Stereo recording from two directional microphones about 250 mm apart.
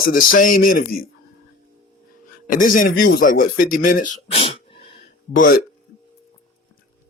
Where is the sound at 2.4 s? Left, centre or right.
Left.